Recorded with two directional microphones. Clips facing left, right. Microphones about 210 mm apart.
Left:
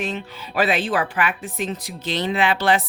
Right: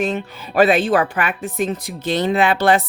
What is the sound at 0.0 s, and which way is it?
Speech, 50° right (ahead or behind).